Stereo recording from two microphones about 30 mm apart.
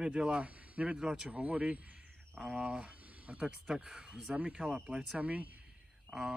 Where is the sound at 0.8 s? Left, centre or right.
Right.